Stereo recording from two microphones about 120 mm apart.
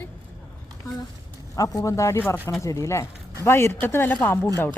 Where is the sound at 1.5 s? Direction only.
30° left (ahead or behind).